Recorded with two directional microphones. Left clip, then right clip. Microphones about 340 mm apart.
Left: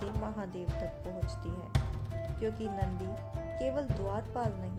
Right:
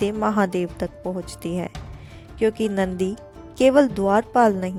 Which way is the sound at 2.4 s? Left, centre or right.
Right.